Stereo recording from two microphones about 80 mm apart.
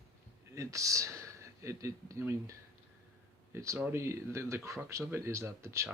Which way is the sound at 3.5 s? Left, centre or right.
Right.